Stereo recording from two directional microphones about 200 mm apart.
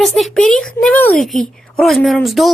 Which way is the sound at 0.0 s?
Centre (ahead or behind).